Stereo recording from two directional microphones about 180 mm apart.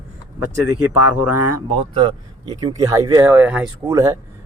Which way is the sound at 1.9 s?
25° right (ahead or behind).